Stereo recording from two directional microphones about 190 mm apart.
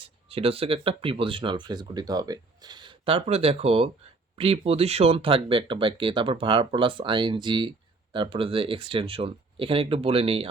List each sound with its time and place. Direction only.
0.3 s speech: 30° right (ahead or behind)